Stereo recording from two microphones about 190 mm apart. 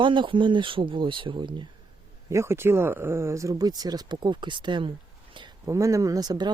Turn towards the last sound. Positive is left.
turn(degrees=-20)  # may be behind; listen again after turning